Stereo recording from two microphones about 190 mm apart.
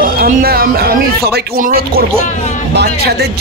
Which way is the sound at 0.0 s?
50° right (ahead or behind).